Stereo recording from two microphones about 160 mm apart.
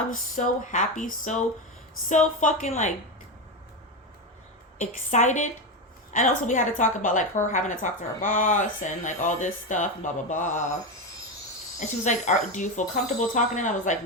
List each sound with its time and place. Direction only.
0.1 s a woman's voice: 50° left (ahead or behind)
4.8 s a woman's voice: 50° left (ahead or behind)
11.8 s a woman's voice: 50° left (ahead or behind)